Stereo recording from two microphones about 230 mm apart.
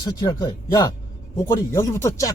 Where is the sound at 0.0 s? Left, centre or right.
Centre.